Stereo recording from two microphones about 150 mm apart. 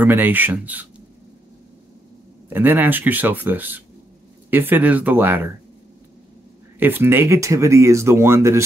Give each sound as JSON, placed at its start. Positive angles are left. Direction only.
{"t": 0.0, "sound": "speech", "side_deg": -10}
{"t": 2.5, "sound": "speech", "side_deg": -10}
{"t": 6.8, "sound": "speech", "side_deg": -15}